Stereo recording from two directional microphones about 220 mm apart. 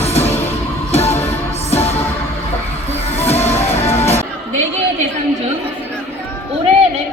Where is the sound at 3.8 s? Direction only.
30° left (ahead or behind).